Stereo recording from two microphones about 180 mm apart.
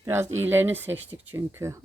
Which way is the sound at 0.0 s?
15° right (ahead or behind).